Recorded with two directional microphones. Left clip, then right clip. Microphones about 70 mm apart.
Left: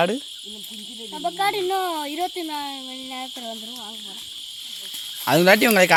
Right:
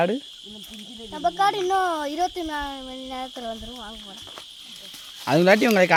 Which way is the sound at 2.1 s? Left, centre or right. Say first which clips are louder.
Right 1 dB; centre.